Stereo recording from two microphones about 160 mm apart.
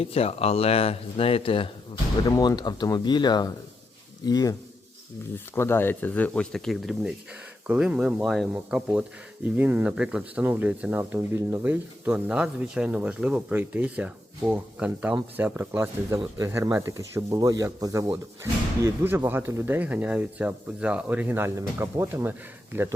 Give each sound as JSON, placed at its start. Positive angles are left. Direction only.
{"t": 0.0, "sound": "speech", "side_deg": 40}
{"t": 2.2, "sound": "speech", "side_deg": 20}
{"t": 5.5, "sound": "speech", "side_deg": 15}